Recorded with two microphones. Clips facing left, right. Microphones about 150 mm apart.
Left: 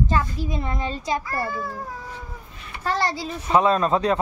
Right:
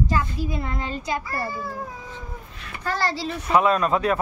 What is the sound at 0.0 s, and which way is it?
A child's voice, 25° left (ahead or behind).